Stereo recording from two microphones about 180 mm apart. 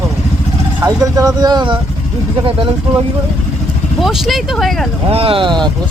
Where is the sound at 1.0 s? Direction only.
20° right (ahead or behind).